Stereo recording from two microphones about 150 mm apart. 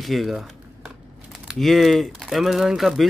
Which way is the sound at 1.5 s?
Centre (ahead or behind).